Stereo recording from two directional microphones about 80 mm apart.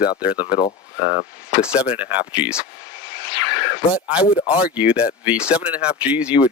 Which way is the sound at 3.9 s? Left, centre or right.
Centre.